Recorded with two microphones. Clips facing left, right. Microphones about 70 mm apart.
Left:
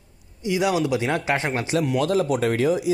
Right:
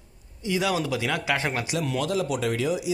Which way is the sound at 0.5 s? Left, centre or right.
Left.